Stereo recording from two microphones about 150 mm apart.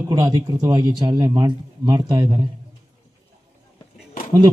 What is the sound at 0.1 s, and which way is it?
Speech, 25° right (ahead or behind).